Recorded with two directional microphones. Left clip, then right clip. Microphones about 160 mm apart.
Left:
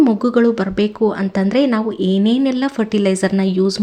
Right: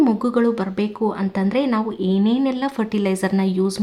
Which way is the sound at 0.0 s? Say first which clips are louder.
Left 4 dB; 20° left (ahead or behind).